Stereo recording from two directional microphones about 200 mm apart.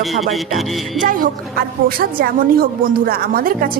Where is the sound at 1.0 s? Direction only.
45° right (ahead or behind).